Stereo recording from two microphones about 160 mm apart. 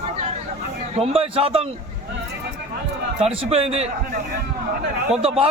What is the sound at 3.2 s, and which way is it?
Speech, 40° right (ahead or behind).